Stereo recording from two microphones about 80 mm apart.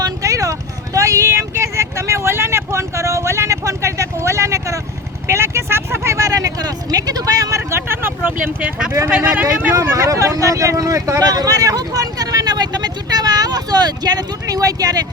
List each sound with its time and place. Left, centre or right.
0.0 s a sound: right
0.9 s vehicle: right
9.0 s speech: centre
9.8 s speech: right